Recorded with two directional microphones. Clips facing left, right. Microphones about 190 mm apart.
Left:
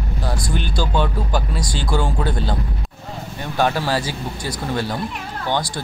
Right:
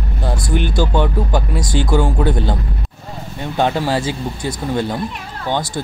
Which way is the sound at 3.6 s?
20° right (ahead or behind).